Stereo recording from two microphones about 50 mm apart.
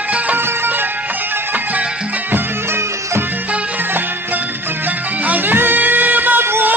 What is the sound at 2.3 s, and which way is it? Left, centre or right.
Music, right.